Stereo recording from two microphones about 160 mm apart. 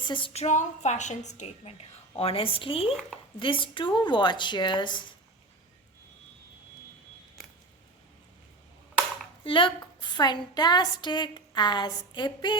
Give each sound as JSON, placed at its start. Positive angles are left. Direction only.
{"t": 0.0, "sound": "a woman's voice", "side_deg": 30}
{"t": 0.4, "sound": "a woman's voice", "side_deg": 45}
{"t": 2.9, "sound": "speech", "side_deg": 5}
{"t": 3.3, "sound": "a woman's voice", "side_deg": 30}
{"t": 9.4, "sound": "a woman's voice", "side_deg": 35}